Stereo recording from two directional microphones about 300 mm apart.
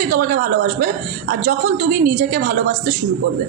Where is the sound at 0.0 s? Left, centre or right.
Right.